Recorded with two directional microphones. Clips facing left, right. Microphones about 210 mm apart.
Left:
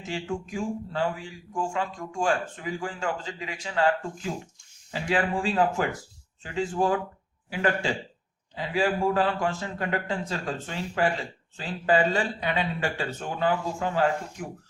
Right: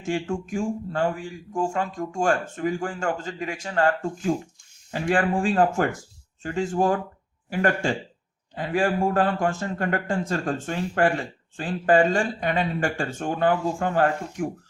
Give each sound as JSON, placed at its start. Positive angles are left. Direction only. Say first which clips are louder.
{"t": 0.0, "sound": "speech", "louder": "right 5 dB", "side_deg": -50}